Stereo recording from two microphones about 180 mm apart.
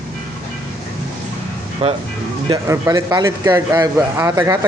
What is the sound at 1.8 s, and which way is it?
Speech, 30° right (ahead or behind).